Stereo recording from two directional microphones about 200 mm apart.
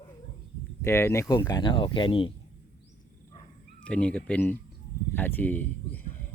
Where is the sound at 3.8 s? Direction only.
5° left (ahead or behind).